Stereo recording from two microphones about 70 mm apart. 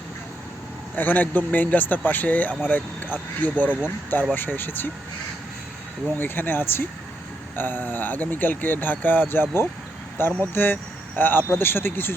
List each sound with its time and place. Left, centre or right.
0.9 s speech: left
3.7 s speech: centre
4.4 s speech: left
6.1 s speech: left